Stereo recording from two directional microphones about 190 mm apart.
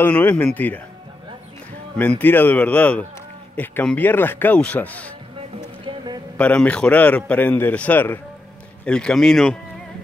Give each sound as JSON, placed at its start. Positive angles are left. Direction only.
{"t": 0.0, "sound": "a man's voice", "side_deg": 10}
{"t": 2.0, "sound": "a man's voice", "side_deg": 10}
{"t": 5.9, "sound": "a sound", "side_deg": -20}
{"t": 6.3, "sound": "a man's voice", "side_deg": 5}